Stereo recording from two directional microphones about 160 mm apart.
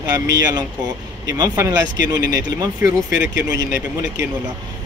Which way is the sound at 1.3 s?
20° right (ahead or behind).